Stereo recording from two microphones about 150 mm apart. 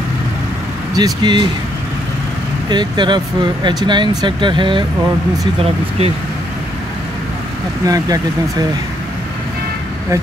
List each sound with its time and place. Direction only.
0.9 s speech: 30° right (ahead or behind)
2.7 s speech: 30° right (ahead or behind)
7.8 s speech: 25° right (ahead or behind)